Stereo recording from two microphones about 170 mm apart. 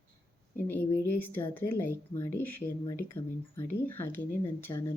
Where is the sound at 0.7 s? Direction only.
10° left (ahead or behind).